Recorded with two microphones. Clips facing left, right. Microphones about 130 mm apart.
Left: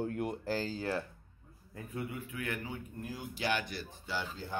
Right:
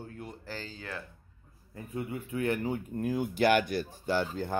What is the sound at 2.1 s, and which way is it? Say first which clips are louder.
Speech: right 8 dB; 35° right (ahead or behind).